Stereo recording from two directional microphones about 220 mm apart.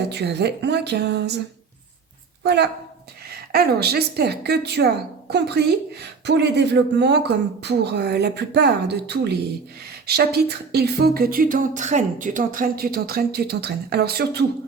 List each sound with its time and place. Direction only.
0.1 s speech: 50° right (ahead or behind)
2.4 s a woman's voice: 50° right (ahead or behind)